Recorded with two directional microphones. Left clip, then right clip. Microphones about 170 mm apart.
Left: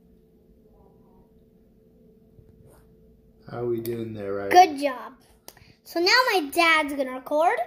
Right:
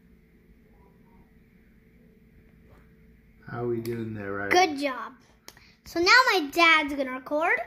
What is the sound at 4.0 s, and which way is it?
Speech, 25° left (ahead or behind).